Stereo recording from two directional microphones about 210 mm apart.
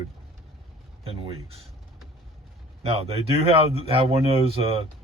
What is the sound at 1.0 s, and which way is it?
Speech, 30° right (ahead or behind).